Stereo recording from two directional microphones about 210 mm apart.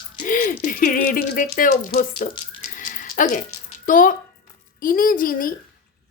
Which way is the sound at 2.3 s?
25° left (ahead or behind).